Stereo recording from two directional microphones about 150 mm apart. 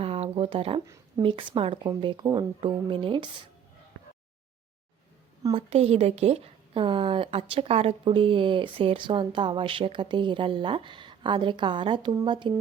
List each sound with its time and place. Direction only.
0.0 s a sound: 40° right (ahead or behind)
1.2 s a woman's voice: 35° right (ahead or behind)
5.5 s a woman's voice: 40° right (ahead or behind)